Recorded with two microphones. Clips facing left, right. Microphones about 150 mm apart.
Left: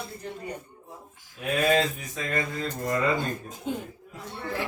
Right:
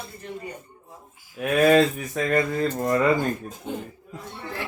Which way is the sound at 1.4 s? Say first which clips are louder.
Right 6 dB; 65° right (ahead or behind).